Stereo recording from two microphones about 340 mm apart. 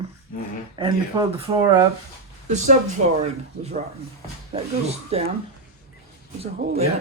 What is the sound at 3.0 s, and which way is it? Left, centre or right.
Speech, right.